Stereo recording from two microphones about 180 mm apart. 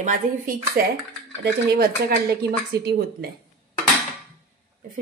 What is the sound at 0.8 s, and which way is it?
Speech, 55° right (ahead or behind).